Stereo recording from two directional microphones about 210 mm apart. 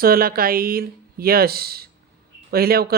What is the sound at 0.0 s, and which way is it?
Speech, 45° right (ahead or behind).